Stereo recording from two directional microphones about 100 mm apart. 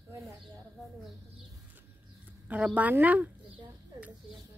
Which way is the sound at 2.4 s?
15° right (ahead or behind).